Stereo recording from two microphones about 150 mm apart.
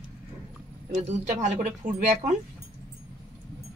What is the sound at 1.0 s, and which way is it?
Speech, 55° right (ahead or behind).